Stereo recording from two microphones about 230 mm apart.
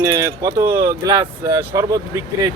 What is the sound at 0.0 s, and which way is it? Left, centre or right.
Speech, centre.